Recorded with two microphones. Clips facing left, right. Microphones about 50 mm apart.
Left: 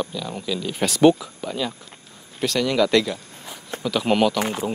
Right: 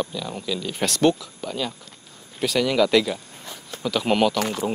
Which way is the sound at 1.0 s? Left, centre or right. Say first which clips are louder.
Left 5 dB; centre.